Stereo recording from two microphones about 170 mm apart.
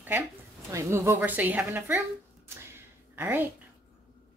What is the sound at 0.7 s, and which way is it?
A woman's voice, 15° right (ahead or behind).